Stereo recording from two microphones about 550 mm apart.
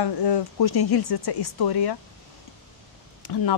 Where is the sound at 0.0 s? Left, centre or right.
Left.